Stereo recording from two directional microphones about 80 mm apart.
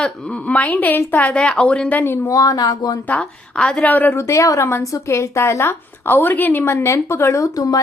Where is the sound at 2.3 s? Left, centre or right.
Left.